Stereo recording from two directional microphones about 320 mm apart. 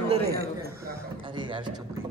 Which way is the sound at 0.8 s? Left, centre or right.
Centre.